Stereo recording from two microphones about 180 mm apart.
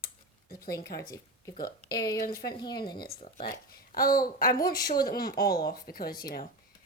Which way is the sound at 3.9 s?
55° left (ahead or behind).